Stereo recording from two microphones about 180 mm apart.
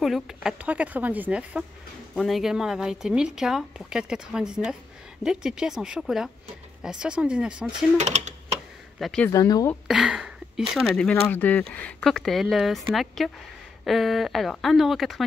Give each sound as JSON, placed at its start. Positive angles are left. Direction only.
{"t": 0.0, "sound": "speech", "side_deg": 0}
{"t": 8.0, "sound": "speech", "side_deg": -40}
{"t": 9.0, "sound": "speech", "side_deg": 5}
{"t": 9.3, "sound": "speech", "side_deg": 20}
{"t": 9.8, "sound": "a sound", "side_deg": -5}
{"t": 10.7, "sound": "speech", "side_deg": 5}